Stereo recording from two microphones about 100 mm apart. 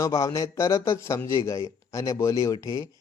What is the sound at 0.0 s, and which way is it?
Speech, 35° left (ahead or behind).